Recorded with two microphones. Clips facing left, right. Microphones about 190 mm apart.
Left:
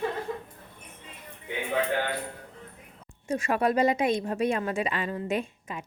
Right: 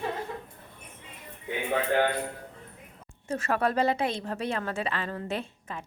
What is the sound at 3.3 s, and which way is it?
A woman's voice, 15° left (ahead or behind).